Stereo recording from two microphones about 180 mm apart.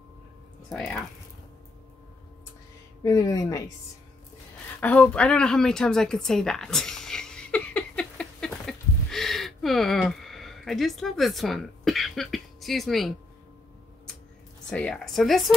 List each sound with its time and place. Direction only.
0.7 s a woman's voice: 5° left (ahead or behind)
3.0 s speech: 20° left (ahead or behind)
4.7 s a sound: 5° left (ahead or behind)
14.7 s a woman's voice: 5° left (ahead or behind)